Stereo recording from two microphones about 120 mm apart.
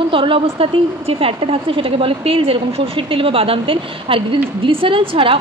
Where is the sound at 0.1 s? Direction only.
45° right (ahead or behind).